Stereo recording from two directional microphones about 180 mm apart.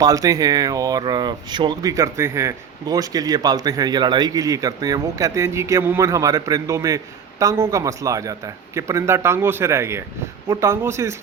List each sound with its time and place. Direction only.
0.0 s speech: 20° right (ahead or behind)